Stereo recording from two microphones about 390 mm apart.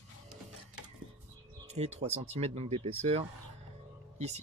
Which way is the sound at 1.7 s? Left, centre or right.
Centre.